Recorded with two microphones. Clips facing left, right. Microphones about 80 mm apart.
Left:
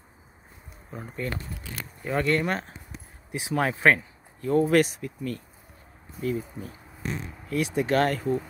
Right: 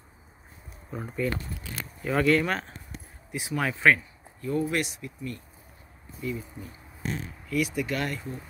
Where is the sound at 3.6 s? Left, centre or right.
Left.